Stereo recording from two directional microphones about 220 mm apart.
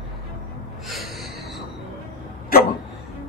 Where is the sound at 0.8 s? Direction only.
Centre (ahead or behind).